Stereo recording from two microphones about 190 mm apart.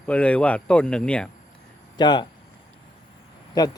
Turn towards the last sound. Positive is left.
turn(degrees=20)  # may be behind; listen again after turning